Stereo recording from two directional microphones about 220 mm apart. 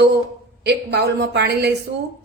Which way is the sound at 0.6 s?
50° right (ahead or behind).